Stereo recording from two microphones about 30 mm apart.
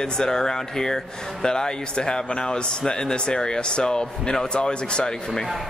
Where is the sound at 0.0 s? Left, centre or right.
Left.